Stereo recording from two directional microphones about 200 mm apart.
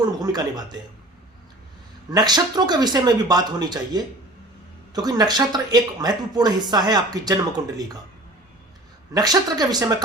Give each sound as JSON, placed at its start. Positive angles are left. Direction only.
{"t": 0.0, "sound": "speech", "side_deg": -20}
{"t": 2.0, "sound": "speech", "side_deg": -20}
{"t": 9.1, "sound": "speech", "side_deg": -20}